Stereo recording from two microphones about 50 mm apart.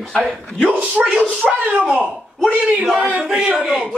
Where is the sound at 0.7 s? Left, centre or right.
Right.